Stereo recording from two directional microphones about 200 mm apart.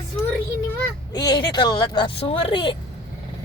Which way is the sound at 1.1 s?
20° left (ahead or behind).